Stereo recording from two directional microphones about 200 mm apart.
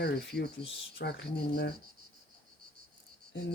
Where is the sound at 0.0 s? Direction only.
55° left (ahead or behind).